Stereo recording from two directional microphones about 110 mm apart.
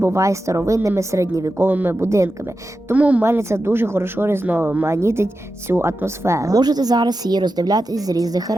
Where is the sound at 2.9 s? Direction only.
15° right (ahead or behind).